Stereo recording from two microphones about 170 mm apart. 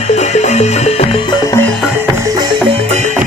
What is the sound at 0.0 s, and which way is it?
Music, 40° left (ahead or behind).